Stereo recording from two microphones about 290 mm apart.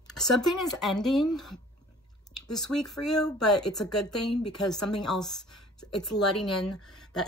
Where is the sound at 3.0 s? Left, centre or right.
Left.